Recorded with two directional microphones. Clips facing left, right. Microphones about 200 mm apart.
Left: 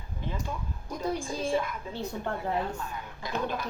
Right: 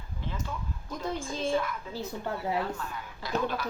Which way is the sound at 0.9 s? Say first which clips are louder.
Left 3 dB; 10° left (ahead or behind).